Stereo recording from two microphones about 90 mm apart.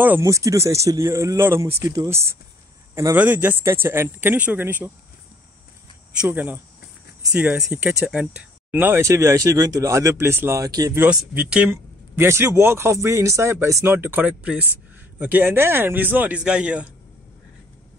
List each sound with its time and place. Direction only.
0.2 s speech: 35° right (ahead or behind)
2.9 s cricket: 30° right (ahead or behind)
3.2 s speech: 20° right (ahead or behind)
6.2 s speech: 20° right (ahead or behind)
8.7 s speech: 25° right (ahead or behind)
10.6 s speech: 45° right (ahead or behind)
11.1 s speech: 10° right (ahead or behind)
11.7 s speech: 30° right (ahead or behind)
14.2 s speech: 15° right (ahead or behind)